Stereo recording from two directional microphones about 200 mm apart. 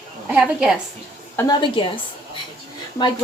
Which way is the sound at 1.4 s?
20° left (ahead or behind).